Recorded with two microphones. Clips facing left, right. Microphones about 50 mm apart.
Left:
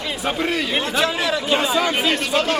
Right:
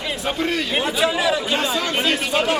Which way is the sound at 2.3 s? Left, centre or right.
Centre.